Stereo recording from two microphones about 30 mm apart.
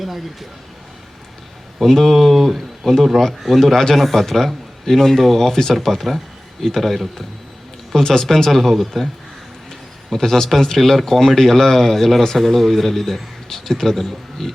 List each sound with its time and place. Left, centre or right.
1.9 s speech: centre
5.5 s speech: centre
7.9 s speech: centre
8.4 s speech: centre
10.1 s a man's voice: centre